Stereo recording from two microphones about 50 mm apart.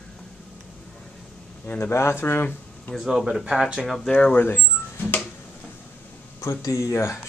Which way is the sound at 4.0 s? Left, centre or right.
Left.